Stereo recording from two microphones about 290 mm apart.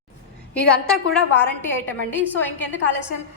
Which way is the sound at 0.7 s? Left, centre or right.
Centre.